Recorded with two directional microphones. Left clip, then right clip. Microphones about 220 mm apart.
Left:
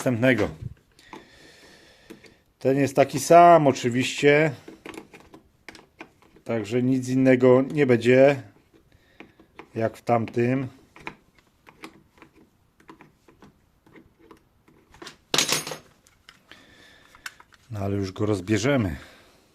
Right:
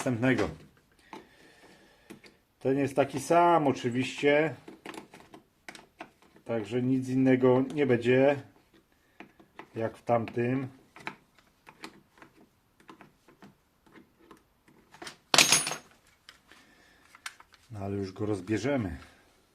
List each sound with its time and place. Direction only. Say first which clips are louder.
0.0 s speech: left 7 dB; 40° left (ahead or behind)
2.6 s speech: left 7 dB; 50° left (ahead or behind)
4.8 s a sound: left 3 dB; 15° left (ahead or behind)
6.4 s speech: left 6 dB; 50° left (ahead or behind)
9.7 s speech: left 5 dB; 50° left (ahead or behind)
15.3 s a sound: right 1 dB; 10° right (ahead or behind)
17.7 s speech: left 6 dB; 40° left (ahead or behind)